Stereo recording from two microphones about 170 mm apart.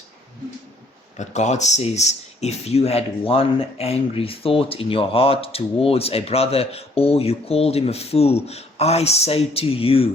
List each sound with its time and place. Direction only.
1.1 s speech: 45° left (ahead or behind)